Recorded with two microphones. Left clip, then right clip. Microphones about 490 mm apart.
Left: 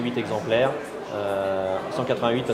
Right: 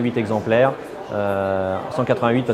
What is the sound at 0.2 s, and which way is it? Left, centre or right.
Speech, right.